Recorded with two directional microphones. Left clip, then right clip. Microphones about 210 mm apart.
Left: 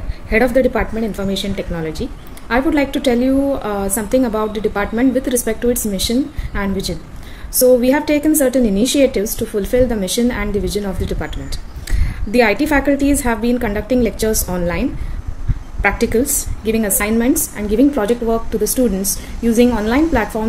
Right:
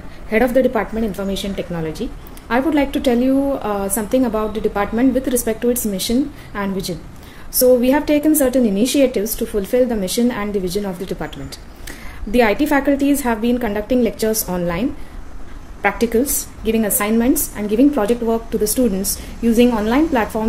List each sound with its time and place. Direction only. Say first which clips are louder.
0.3 s a woman's voice: left 1 dB; centre (ahead or behind)